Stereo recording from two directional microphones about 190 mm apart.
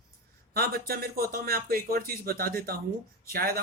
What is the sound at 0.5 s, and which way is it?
Speech, 55° right (ahead or behind).